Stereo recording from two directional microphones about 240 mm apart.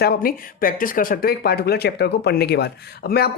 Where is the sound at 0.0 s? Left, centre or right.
Left.